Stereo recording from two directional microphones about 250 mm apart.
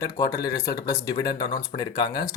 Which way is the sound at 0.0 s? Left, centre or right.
Centre.